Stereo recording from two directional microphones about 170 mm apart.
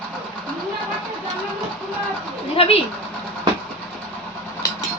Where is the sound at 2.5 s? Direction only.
35° left (ahead or behind).